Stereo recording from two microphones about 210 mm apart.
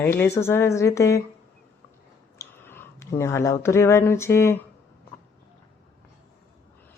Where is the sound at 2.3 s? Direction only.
10° left (ahead or behind).